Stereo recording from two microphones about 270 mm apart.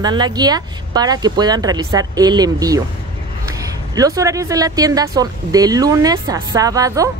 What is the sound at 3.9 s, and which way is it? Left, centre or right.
Speech, centre.